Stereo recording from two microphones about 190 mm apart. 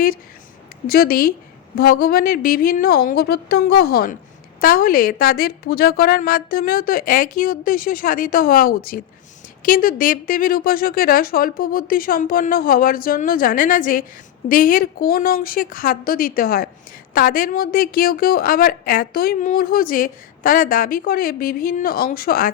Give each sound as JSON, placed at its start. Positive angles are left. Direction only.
{"t": 0.9, "sound": "a woman's voice", "side_deg": 55}